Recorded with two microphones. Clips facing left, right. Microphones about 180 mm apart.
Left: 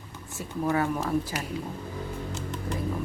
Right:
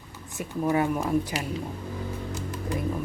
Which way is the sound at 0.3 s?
20° right (ahead or behind).